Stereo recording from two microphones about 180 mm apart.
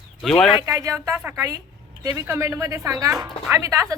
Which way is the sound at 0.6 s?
15° right (ahead or behind).